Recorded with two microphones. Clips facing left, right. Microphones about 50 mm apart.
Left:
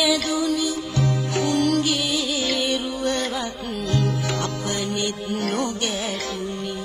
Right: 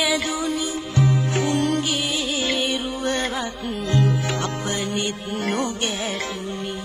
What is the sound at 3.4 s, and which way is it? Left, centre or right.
Music, centre.